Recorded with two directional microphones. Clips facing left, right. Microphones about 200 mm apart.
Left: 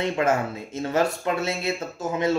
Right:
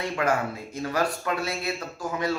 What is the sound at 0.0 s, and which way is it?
Speech, 25° left (ahead or behind).